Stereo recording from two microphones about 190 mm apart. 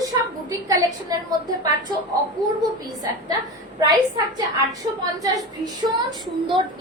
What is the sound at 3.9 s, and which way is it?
Speech, 20° right (ahead or behind).